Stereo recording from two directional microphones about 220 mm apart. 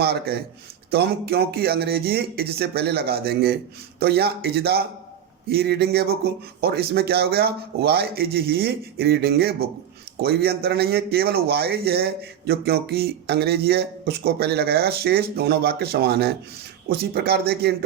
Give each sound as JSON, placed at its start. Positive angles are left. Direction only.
{"t": 0.0, "sound": "speech", "side_deg": -45}